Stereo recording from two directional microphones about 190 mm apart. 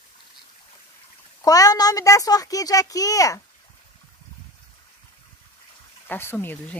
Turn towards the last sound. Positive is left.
turn(degrees=10)  # may be behind; listen again after turning